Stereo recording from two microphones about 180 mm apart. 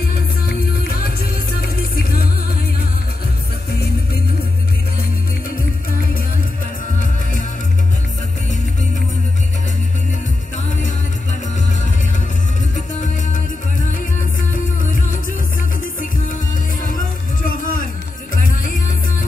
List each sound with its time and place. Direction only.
1.8 s music: 55° left (ahead or behind)
14.5 s music: 50° left (ahead or behind)
17.4 s music: 50° left (ahead or behind)